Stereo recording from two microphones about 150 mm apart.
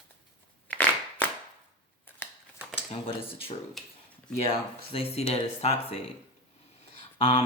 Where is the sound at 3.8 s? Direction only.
Centre (ahead or behind).